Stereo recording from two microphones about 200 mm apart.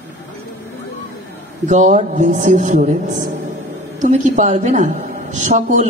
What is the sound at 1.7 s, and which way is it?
A woman's voice, 40° right (ahead or behind).